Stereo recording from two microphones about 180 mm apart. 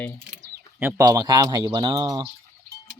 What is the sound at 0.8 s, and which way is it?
Speech, 15° right (ahead or behind).